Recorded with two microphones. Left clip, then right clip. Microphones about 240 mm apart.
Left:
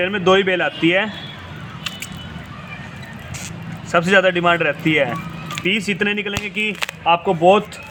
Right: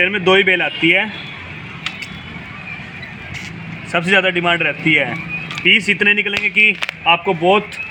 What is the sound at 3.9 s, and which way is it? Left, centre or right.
A man's voice, centre.